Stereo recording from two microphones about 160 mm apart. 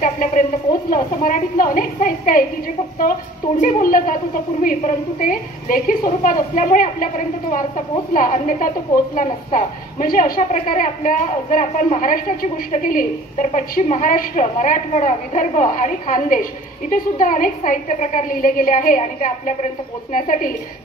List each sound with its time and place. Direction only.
0.0 s a woman's voice: 55° left (ahead or behind)
3.6 s a woman's voice: 60° left (ahead or behind)